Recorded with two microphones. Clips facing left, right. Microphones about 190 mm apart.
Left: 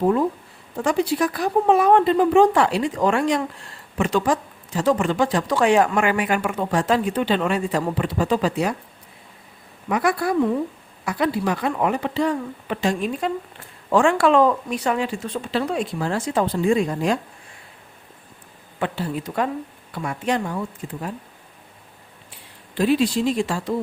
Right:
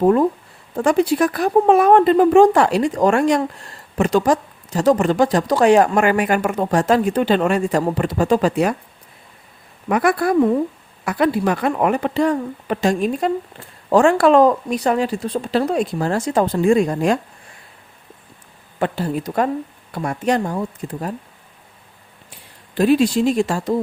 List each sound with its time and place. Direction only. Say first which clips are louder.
0.0 s speech: right 5 dB; 50° right (ahead or behind)
9.9 s speech: right 4 dB; 55° right (ahead or behind)
18.8 s speech: right 4 dB; 45° right (ahead or behind)
22.3 s speech: right 1 dB; 45° right (ahead or behind)